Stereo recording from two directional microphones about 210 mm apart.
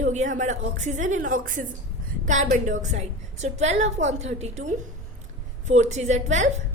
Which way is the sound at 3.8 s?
60° right (ahead or behind).